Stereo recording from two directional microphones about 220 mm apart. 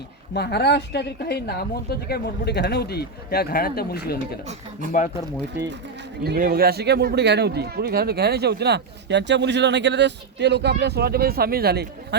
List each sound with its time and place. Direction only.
0.3 s speech: 50° left (ahead or behind)
6.2 s speech: 45° right (ahead or behind)